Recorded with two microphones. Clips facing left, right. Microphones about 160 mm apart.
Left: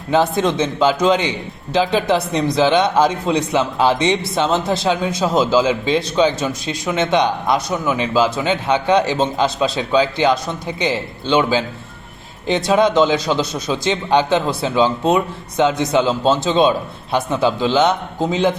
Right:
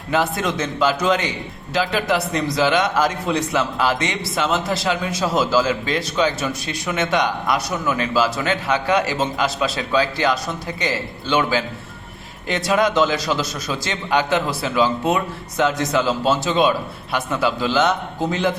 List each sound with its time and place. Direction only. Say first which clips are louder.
0.4 s speech: left 4 dB; 25° left (ahead or behind)
12.6 s speech: left 3 dB; 25° left (ahead or behind)